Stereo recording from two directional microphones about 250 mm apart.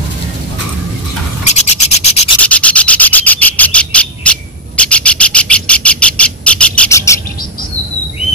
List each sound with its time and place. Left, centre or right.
1.5 s rub: left
2.4 s rub: centre